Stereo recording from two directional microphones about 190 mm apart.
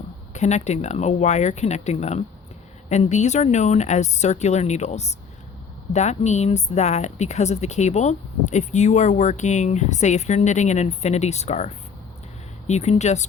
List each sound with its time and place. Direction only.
0.3 s speech: 35° left (ahead or behind)